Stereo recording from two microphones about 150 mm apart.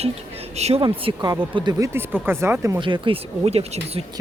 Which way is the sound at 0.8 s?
30° right (ahead or behind).